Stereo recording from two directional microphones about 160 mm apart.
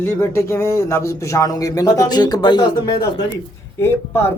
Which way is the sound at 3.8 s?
15° left (ahead or behind).